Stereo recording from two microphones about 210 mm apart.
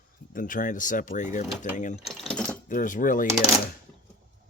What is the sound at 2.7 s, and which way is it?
Speech, 40° left (ahead or behind).